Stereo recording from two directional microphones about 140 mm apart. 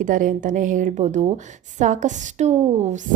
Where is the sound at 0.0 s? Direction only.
70° right (ahead or behind).